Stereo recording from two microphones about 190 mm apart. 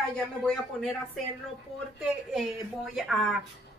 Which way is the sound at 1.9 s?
Centre (ahead or behind).